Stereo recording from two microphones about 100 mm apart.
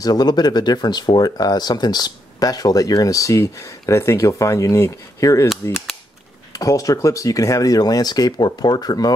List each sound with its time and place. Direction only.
0.0 s speech: 45° left (ahead or behind)
6.5 s speech: 35° left (ahead or behind)